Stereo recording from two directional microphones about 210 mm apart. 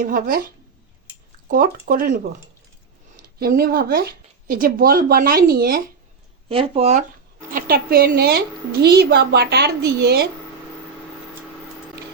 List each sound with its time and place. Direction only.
0.0 s a woman's voice: 45° right (ahead or behind)
6.5 s speech: 25° right (ahead or behind)
7.5 s a woman's voice: 45° right (ahead or behind)